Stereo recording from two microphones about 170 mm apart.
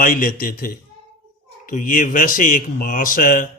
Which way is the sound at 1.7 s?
55° left (ahead or behind).